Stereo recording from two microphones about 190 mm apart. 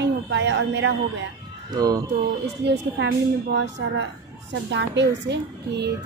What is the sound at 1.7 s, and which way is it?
Speech, 20° right (ahead or behind).